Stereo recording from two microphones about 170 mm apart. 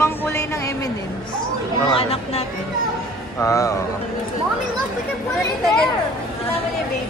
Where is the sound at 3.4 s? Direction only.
20° left (ahead or behind).